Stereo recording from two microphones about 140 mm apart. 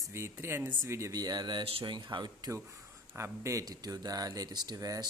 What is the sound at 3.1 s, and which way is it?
Speech, 20° right (ahead or behind).